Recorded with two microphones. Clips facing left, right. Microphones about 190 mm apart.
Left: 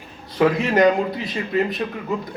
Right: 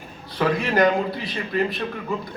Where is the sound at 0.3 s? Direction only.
20° left (ahead or behind).